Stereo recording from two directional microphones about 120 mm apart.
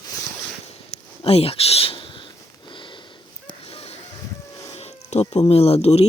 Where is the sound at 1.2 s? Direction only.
55° left (ahead or behind).